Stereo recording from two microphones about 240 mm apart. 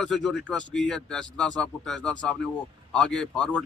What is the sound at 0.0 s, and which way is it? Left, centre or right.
A man's voice, centre.